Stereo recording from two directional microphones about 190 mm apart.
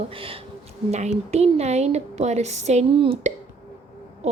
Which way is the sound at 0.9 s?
35° right (ahead or behind).